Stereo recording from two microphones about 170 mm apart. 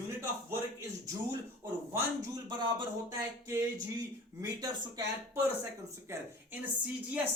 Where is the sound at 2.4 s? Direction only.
25° right (ahead or behind).